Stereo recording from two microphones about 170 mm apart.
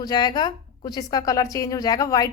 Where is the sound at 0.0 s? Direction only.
25° left (ahead or behind).